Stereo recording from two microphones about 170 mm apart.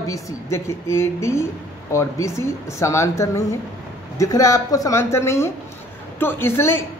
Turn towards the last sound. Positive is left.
turn(degrees=15)  # may be behind; listen again after turning